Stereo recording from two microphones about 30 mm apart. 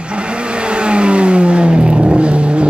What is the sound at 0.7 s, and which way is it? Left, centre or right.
Vehicle, right.